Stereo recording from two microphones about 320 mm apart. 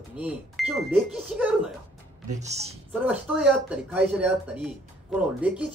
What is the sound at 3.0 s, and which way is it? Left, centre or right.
Speech, centre.